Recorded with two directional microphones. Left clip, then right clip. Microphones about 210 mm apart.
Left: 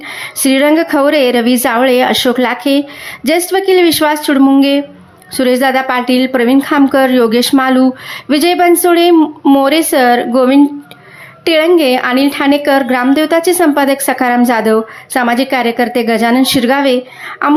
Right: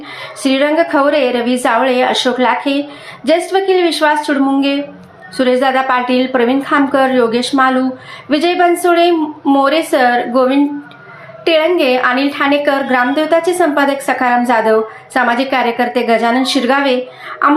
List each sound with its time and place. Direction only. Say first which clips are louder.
0.2 s a woman's voice: left 2 dB; 40° left (ahead or behind)